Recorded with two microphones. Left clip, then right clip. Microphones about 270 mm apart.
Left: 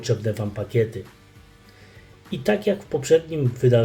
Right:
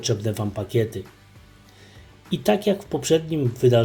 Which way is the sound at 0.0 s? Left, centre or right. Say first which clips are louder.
Even; right.